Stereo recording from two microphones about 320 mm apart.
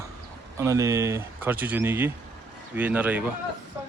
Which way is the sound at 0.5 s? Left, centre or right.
Centre.